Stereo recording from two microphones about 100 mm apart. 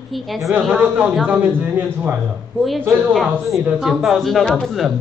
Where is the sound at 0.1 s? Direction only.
Centre (ahead or behind).